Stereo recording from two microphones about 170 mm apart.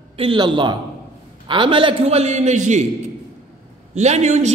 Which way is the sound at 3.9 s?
40° right (ahead or behind).